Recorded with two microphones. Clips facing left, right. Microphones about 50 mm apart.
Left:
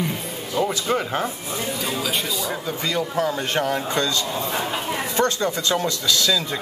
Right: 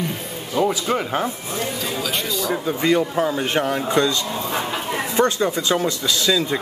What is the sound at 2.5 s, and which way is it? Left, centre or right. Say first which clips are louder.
Speech: right 9 dB; right.